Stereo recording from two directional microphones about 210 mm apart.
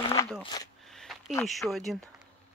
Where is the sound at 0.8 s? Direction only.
Centre (ahead or behind).